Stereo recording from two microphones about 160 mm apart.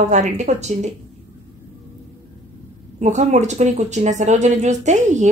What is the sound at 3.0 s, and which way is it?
Speech, 45° right (ahead or behind).